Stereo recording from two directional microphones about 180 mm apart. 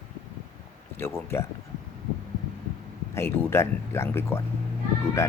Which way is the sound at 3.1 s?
15° left (ahead or behind).